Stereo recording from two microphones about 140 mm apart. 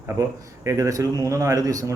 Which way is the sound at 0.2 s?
20° right (ahead or behind).